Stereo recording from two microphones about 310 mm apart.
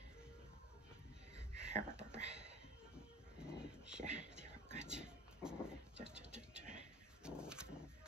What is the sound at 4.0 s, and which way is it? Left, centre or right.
Whispering, right.